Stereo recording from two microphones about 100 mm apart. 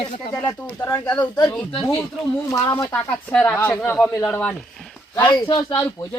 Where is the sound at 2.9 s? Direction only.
15° left (ahead or behind).